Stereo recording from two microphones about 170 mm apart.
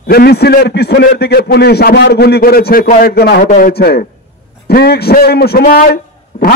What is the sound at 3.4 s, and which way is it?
A man's voice, 55° left (ahead or behind).